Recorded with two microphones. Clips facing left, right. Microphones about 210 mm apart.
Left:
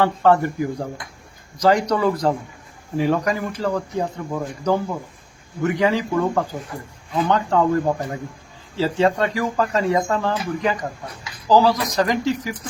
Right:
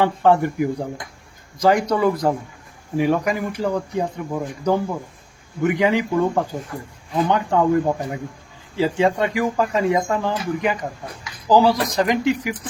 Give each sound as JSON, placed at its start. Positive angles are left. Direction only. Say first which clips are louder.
{"t": 0.0, "sound": "speech", "louder": "even", "side_deg": -15}